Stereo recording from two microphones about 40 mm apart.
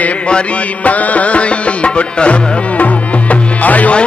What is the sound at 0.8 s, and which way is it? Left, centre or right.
Music, left.